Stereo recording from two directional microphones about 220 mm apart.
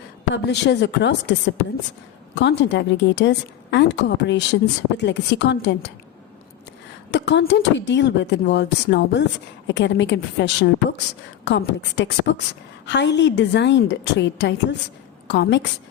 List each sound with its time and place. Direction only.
0.4 s a woman's voice: 50° left (ahead or behind)
7.1 s a woman's voice: 50° left (ahead or behind)